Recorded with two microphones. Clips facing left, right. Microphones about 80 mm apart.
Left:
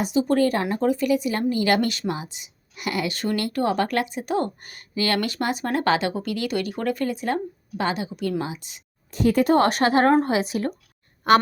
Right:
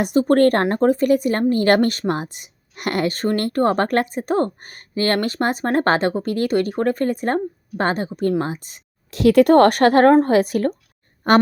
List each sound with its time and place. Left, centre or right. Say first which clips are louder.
0.0 s speech: right 5 dB; right
9.0 s speech: right 6 dB; right